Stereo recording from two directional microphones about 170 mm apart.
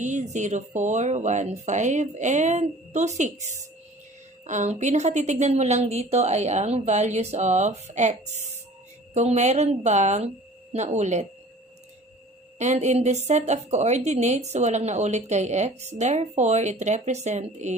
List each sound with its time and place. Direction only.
0.0 s a woman's voice: 45° right (ahead or behind)
12.5 s a woman's voice: 45° right (ahead or behind)